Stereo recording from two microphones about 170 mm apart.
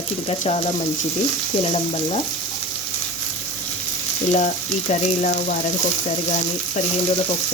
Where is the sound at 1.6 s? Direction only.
35° left (ahead or behind).